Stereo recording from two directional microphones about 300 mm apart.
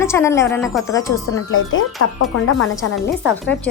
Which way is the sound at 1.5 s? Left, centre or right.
Left.